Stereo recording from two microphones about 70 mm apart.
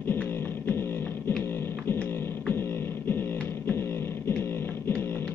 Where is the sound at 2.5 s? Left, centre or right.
Left.